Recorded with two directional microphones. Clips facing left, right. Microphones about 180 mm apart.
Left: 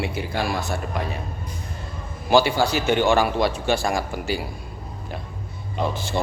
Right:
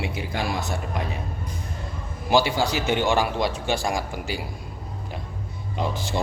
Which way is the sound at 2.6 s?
15° right (ahead or behind).